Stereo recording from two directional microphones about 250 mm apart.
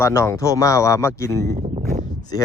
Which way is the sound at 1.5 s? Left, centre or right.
Right.